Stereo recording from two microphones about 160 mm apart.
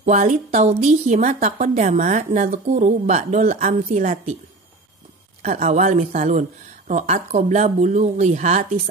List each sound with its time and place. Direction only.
0.0 s a woman's voice: 45° right (ahead or behind)
5.4 s a woman's voice: 45° right (ahead or behind)